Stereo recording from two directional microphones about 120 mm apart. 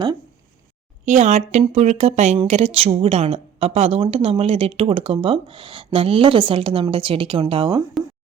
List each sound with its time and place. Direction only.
1.0 s a woman's voice: 75° right (ahead or behind); by 7.8 s 45° right (ahead or behind)